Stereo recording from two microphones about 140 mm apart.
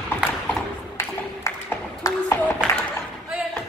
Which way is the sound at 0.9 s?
20° left (ahead or behind).